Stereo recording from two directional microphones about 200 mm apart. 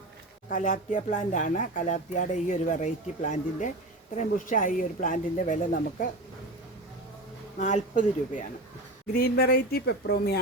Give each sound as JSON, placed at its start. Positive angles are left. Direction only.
{"t": 0.5, "sound": "speech", "side_deg": 40}
{"t": 7.6, "sound": "speech", "side_deg": 40}
{"t": 9.1, "sound": "speech", "side_deg": 50}